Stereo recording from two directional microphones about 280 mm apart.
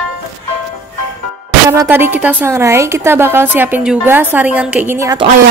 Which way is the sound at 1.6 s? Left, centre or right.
Centre.